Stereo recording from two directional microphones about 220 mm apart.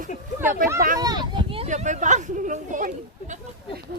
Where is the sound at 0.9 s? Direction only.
20° right (ahead or behind); by 3.3 s 35° right (ahead or behind).